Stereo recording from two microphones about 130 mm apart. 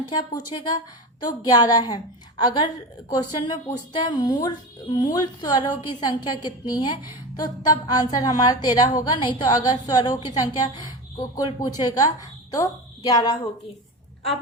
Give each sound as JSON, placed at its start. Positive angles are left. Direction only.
{"t": 0.1, "sound": "a woman's voice", "side_deg": 30}